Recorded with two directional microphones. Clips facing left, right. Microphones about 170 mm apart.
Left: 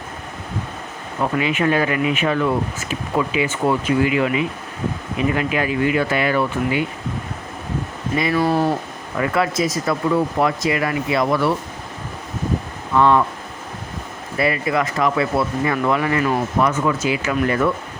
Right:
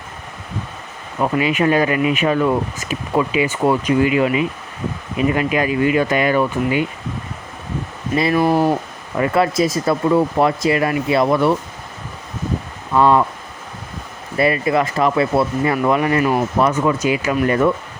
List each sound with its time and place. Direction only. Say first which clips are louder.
1.2 s speech: right 3 dB; 15° right (ahead or behind)
4.1 s speech: right 2 dB; 25° right (ahead or behind)
8.1 s speech: right 3 dB; 35° right (ahead or behind)
8.4 s speech: right 3 dB; 15° right (ahead or behind)
9.1 s speech: right 3 dB; 30° right (ahead or behind)
13.0 s speech: right 1 dB; 20° right (ahead or behind)
14.3 s speech: right 3 dB; 25° right (ahead or behind)
17.4 s speech: right 3 dB; 30° right (ahead or behind)